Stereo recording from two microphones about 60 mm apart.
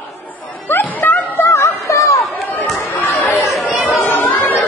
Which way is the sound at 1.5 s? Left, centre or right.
Left.